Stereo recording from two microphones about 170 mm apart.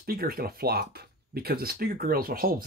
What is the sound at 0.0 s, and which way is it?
Speech, 60° right (ahead or behind).